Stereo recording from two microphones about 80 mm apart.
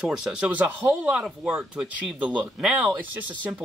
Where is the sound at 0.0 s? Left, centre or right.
Centre.